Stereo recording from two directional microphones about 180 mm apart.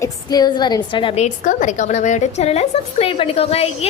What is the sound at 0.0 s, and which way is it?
A woman's voice, 20° left (ahead or behind).